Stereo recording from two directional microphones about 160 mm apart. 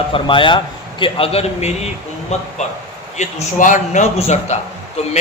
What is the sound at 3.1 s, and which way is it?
A man's voice, 50° left (ahead or behind).